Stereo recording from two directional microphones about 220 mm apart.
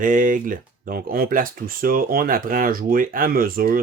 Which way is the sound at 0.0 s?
35° right (ahead or behind).